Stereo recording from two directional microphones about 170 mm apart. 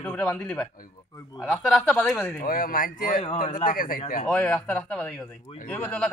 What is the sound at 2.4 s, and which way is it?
Speech, 55° left (ahead or behind).